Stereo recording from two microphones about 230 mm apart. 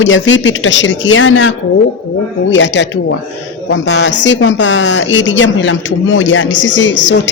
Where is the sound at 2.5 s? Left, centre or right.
Left.